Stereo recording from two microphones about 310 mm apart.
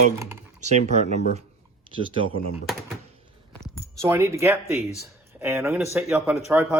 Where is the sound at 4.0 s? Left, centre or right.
Centre.